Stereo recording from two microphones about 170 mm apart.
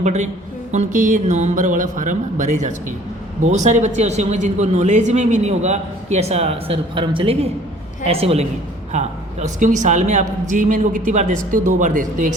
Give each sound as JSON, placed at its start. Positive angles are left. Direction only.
{"t": 0.0, "sound": "speech", "side_deg": -45}